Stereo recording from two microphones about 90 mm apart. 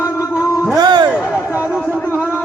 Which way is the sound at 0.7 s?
50° right (ahead or behind).